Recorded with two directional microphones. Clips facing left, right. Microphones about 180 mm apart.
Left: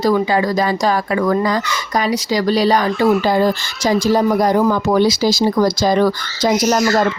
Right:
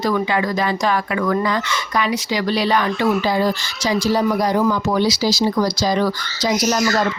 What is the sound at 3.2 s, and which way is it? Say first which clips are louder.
Speech: left 4 dB; 50° left (ahead or behind).